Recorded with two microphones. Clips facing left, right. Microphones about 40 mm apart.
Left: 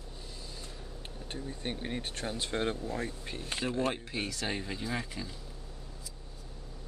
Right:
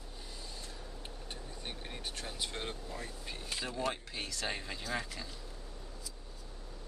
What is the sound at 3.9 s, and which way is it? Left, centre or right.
Speech, centre.